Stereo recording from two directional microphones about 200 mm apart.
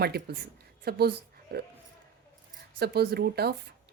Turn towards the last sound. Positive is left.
turn(degrees=-50)  # may be behind; listen again after turning